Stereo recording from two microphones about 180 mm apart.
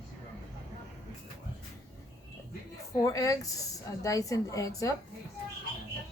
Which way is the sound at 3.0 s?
20° left (ahead or behind).